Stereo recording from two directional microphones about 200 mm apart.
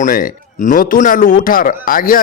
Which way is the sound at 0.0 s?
45° left (ahead or behind).